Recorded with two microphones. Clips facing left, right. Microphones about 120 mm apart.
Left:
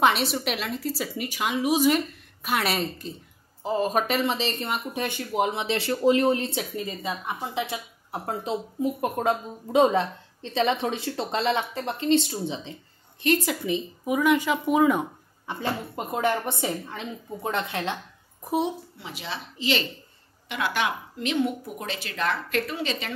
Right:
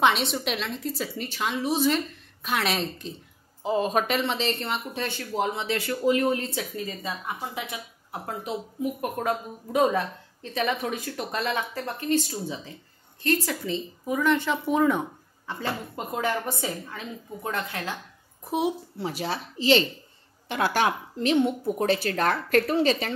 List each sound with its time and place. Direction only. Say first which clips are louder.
0.0 s a woman's voice: left 1 dB; 5° left (ahead or behind)
16.2 s speech: left 3 dB; 25° left (ahead or behind)
18.9 s speech: right 6 dB; 40° right (ahead or behind)